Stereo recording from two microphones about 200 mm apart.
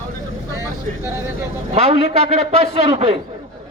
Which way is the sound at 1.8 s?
30° right (ahead or behind).